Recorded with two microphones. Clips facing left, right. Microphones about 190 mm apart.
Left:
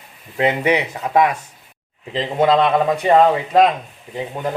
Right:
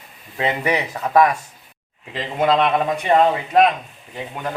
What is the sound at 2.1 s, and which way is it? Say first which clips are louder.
Speech: left 3 dB; 30° left (ahead or behind).